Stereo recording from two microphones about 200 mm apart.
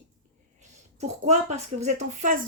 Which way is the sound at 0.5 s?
35° right (ahead or behind).